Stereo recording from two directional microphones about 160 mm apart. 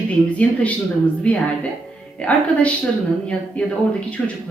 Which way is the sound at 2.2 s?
10° left (ahead or behind).